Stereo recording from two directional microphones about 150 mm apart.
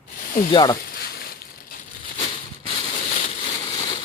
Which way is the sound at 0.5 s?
30° left (ahead or behind).